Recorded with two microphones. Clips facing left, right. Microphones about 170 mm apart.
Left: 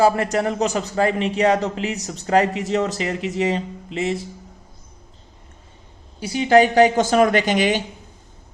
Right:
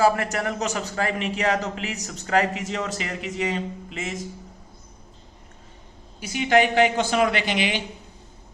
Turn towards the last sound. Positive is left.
turn(degrees=45)  # may be behind; listen again after turning